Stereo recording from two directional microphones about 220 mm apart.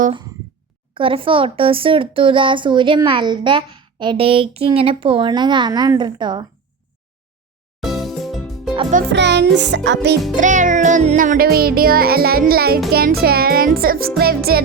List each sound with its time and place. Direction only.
0.9 s speech: 25° right (ahead or behind)
7.8 s music: centre (ahead or behind)
8.7 s music: 25° right (ahead or behind)
9.1 s music: 50° right (ahead or behind)
10.3 s music: 35° right (ahead or behind)